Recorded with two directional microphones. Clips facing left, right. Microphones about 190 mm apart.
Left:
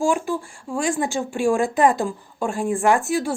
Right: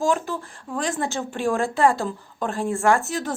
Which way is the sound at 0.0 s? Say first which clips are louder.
Left 2 dB; 10° left (ahead or behind).